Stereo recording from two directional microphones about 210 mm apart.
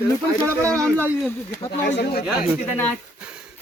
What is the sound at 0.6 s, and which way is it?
Speech, 5° left (ahead or behind).